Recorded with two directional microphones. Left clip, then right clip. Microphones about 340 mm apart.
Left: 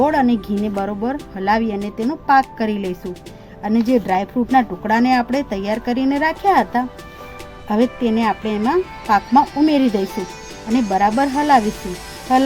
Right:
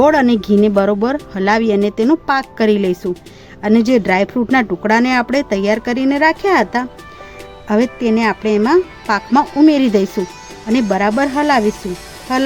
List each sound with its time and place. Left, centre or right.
0.0 s speech: right